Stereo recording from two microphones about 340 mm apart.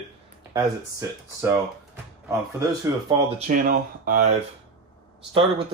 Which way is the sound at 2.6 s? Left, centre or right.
Centre.